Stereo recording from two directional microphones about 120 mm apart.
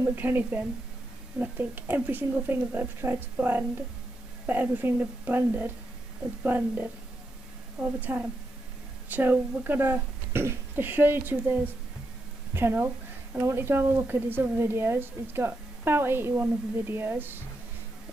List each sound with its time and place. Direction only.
0.0 s speech: 15° right (ahead or behind)